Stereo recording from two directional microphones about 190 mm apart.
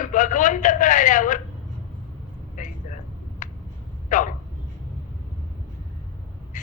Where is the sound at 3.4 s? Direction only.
40° left (ahead or behind).